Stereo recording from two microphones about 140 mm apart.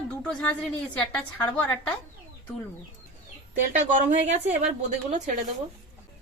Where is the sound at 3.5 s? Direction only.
60° right (ahead or behind).